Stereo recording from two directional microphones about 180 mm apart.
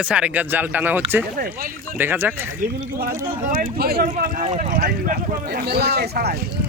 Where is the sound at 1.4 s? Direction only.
55° right (ahead or behind).